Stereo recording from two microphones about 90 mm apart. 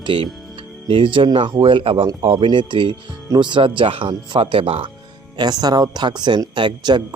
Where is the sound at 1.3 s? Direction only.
65° right (ahead or behind); by 4.8 s 85° right.